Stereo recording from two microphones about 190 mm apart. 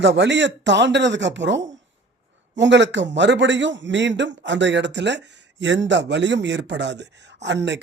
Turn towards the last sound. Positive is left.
turn(degrees=-65)  # may be behind; listen again after turning